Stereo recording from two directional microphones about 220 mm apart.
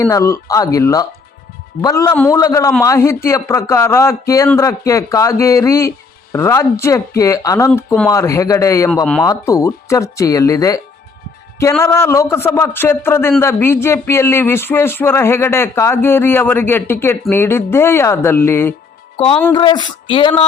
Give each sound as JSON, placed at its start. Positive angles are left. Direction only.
{"t": 0.0, "sound": "a man's voice", "side_deg": 15}
{"t": 9.2, "sound": "a man's voice", "side_deg": 15}
{"t": 19.1, "sound": "speech", "side_deg": 25}